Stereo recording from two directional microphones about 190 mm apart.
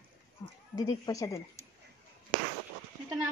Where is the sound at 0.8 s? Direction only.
20° left (ahead or behind).